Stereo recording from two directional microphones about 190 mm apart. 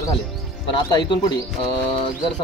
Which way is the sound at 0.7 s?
25° left (ahead or behind).